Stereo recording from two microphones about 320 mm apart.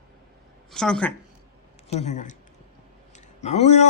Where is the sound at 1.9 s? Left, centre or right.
Left.